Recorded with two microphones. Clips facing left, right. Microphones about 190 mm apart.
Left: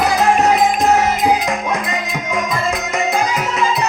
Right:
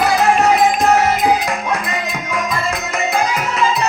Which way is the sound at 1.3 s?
20° left (ahead or behind).